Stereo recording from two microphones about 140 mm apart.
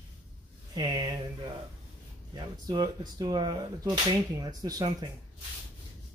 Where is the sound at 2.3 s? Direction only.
30° right (ahead or behind).